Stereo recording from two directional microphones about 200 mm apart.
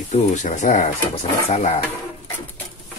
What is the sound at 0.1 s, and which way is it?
Speech, 35° left (ahead or behind).